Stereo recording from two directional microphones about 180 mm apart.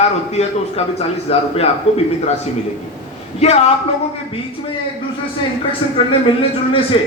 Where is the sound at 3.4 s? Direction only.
35° left (ahead or behind).